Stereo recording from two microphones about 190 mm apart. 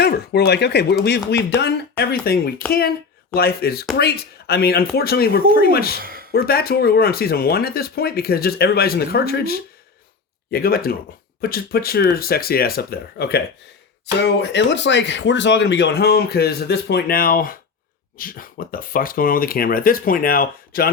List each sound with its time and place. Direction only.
0.0 s speech: 55° left (ahead or behind)
6.0 s a sound: 50° right (ahead or behind)
6.3 s speech: 55° left (ahead or behind)